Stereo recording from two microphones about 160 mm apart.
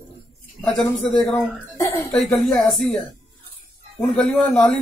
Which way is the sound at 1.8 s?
15° left (ahead or behind).